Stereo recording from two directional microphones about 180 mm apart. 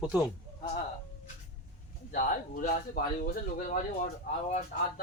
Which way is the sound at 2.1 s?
50° left (ahead or behind).